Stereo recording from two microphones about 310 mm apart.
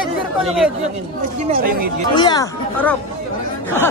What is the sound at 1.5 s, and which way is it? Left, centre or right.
Speech, right.